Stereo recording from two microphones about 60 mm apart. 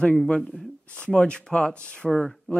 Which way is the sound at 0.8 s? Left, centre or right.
Left.